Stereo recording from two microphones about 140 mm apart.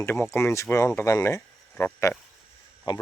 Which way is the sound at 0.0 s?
15° left (ahead or behind).